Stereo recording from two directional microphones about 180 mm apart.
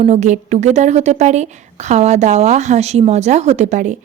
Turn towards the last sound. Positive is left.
turn(degrees=-40)  # may be behind; listen again after turning